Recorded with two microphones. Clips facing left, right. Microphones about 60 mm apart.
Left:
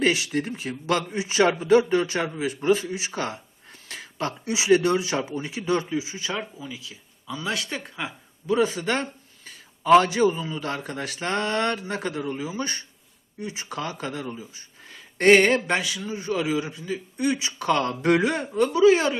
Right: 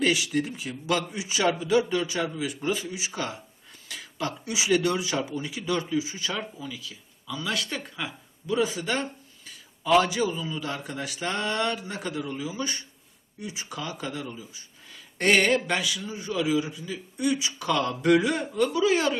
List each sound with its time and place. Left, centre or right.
0.0 s a man's voice: left
8.6 s a man's voice: left